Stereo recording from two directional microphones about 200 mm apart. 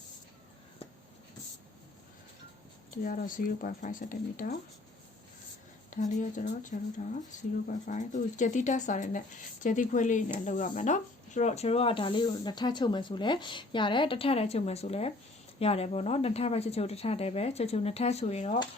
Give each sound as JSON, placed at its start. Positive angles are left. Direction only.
{"t": 2.9, "sound": "speech", "side_deg": 45}
{"t": 5.9, "sound": "speech", "side_deg": 40}